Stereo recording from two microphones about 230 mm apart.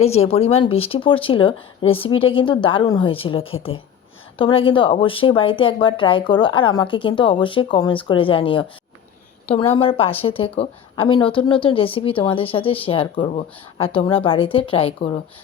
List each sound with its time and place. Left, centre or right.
0.0 s speech: left